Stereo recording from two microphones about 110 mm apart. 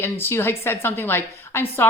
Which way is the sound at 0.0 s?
20° left (ahead or behind).